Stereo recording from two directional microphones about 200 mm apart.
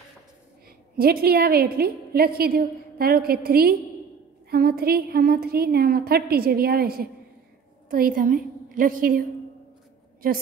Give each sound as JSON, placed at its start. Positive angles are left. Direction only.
{"t": 0.9, "sound": "a woman's voice", "side_deg": -50}